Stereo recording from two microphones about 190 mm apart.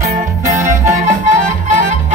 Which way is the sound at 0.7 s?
15° right (ahead or behind).